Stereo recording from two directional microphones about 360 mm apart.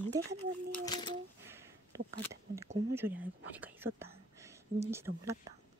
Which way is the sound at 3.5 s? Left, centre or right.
Centre.